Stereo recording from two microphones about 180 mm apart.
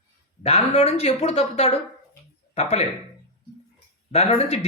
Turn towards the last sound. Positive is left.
turn(degrees=35)  # may be behind; listen again after turning